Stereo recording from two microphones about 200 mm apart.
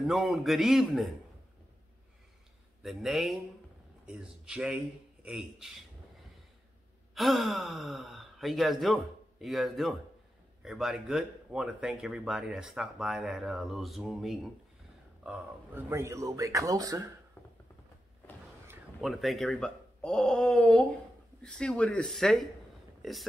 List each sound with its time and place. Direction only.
0.0 s speech: centre (ahead or behind)
2.8 s speech: centre (ahead or behind)
7.2 s speech: centre (ahead or behind)
15.2 s speech: 10° right (ahead or behind)
18.9 s speech: centre (ahead or behind)